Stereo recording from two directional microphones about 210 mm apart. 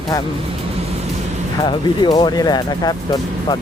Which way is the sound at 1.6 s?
20° left (ahead or behind).